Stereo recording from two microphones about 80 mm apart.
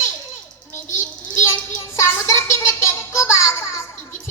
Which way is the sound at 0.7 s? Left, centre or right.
Left.